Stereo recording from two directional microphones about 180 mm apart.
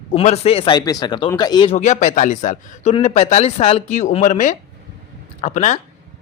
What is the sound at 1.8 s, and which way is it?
Speech, 40° left (ahead or behind).